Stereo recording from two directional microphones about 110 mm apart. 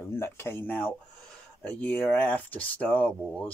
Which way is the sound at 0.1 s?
20° left (ahead or behind).